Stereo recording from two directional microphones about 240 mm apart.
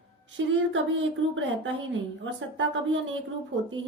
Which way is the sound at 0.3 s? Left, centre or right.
Right.